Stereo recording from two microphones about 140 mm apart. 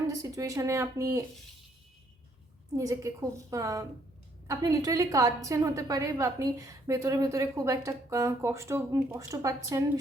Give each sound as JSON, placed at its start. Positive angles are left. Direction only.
{"t": 0.1, "sound": "a woman's voice", "side_deg": -25}
{"t": 2.7, "sound": "a woman's voice", "side_deg": -25}